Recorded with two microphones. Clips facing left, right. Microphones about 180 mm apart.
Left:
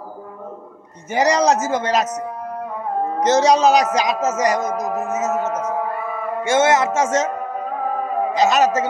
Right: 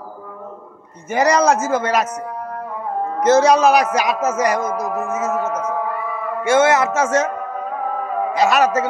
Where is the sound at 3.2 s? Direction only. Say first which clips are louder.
Right 2 dB; 20° left (ahead or behind).